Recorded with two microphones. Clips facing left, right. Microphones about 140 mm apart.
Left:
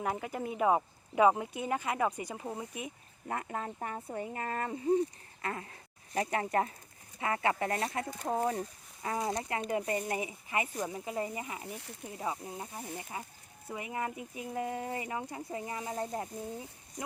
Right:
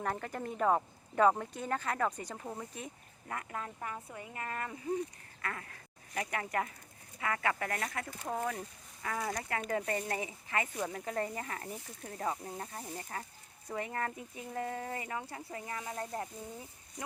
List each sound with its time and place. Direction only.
0.0 s speech: 10° left (ahead or behind)
3.2 s speech: 30° left (ahead or behind)